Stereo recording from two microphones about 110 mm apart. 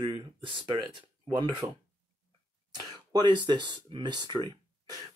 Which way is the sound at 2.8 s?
40° right (ahead or behind).